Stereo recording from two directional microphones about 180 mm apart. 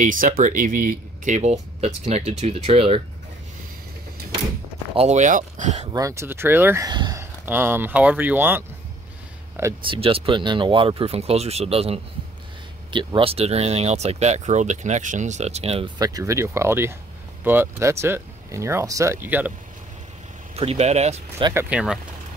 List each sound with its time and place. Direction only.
0.0 s speech: 45° right (ahead or behind)
4.9 s speech: 40° right (ahead or behind)
5.9 s speech: 20° right (ahead or behind)
7.4 s speech: 10° right (ahead or behind)
9.8 s speech: 30° right (ahead or behind)
16.0 s speech: 20° right (ahead or behind)
20.5 s speech: 35° right (ahead or behind)
21.6 s speech: 5° right (ahead or behind)